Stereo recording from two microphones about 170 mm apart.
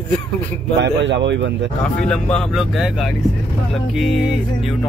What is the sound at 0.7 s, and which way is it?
Speech, 90° right.